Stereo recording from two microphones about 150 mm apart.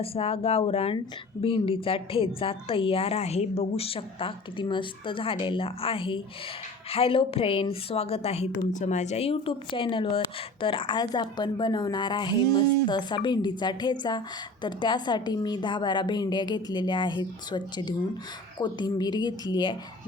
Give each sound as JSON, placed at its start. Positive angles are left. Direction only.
{"t": 0.0, "sound": "a woman's voice", "side_deg": 40}